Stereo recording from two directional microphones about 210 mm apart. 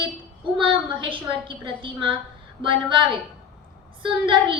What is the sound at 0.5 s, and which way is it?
A woman's voice, 25° right (ahead or behind).